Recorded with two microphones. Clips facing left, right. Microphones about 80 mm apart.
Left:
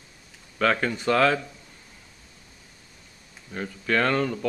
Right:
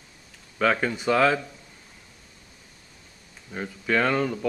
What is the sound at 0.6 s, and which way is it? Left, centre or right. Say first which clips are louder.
Speech: even; centre.